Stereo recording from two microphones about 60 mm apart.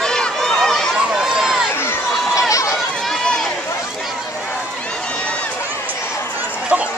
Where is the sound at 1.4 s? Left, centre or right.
Centre.